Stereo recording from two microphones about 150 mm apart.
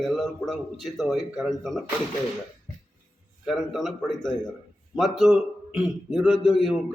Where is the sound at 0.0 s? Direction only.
Centre (ahead or behind).